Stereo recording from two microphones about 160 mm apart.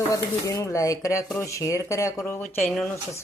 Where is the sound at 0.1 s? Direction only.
20° left (ahead or behind).